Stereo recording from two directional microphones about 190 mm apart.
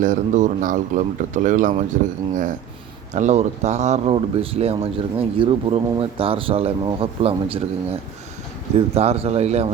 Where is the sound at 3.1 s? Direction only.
40° right (ahead or behind).